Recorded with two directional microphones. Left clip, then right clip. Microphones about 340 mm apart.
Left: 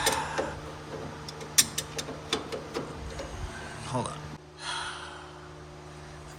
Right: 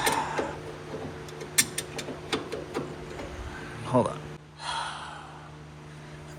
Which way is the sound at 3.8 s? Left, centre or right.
Centre.